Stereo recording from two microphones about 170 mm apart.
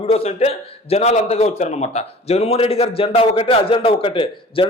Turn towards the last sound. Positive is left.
turn(degrees=30)  # may be behind; listen again after turning